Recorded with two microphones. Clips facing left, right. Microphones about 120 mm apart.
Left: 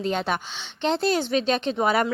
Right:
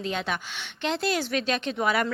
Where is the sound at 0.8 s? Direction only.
30° left (ahead or behind).